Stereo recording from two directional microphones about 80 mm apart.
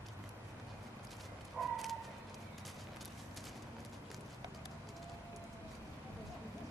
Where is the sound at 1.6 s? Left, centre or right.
Centre.